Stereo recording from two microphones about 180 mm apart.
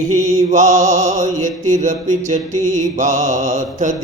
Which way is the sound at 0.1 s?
45° right (ahead or behind).